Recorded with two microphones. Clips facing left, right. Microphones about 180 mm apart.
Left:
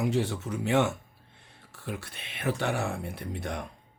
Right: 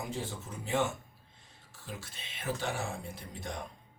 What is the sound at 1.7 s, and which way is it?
Speech, 65° left (ahead or behind).